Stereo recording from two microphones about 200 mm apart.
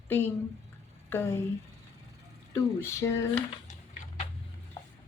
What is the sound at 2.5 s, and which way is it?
Speech, 15° left (ahead or behind).